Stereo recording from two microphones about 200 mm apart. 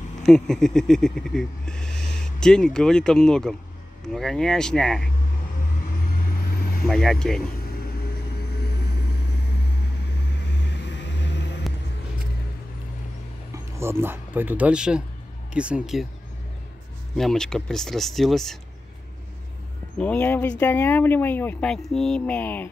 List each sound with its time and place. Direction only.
0.2 s speech: 5° left (ahead or behind)
6.9 s speech: centre (ahead or behind)
10.6 s vehicle: 60° left (ahead or behind)
13.5 s speech: 15° right (ahead or behind)
17.2 s speech: centre (ahead or behind)
20.0 s speech: 5° left (ahead or behind)